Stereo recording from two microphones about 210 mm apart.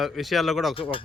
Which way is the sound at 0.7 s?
25° left (ahead or behind).